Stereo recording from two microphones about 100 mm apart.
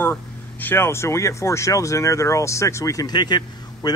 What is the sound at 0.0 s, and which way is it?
Speech, 20° left (ahead or behind).